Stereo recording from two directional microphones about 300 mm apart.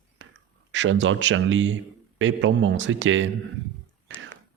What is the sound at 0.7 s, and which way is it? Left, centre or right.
Speech, right.